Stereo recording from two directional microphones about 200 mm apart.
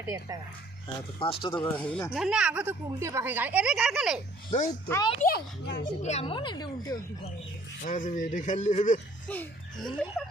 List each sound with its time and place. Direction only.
0.0 s speech: 10° right (ahead or behind)
1.2 s a woman's voice: 25° left (ahead or behind)
1.7 s speech: 5° left (ahead or behind)
4.7 s a woman's voice: 20° left (ahead or behind)
5.2 s a child's voice: 55° left (ahead or behind)
5.8 s a woman's voice: 35° left (ahead or behind); by 7.0 s 20° left (ahead or behind)
7.9 s speech: 40° left (ahead or behind)
9.2 s laughter: 5° left (ahead or behind)